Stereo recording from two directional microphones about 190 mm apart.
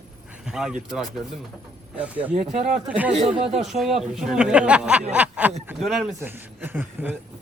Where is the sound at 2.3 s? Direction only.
40° right (ahead or behind).